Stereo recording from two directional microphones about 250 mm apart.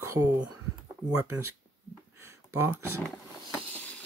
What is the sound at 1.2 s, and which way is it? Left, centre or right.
Speech, centre.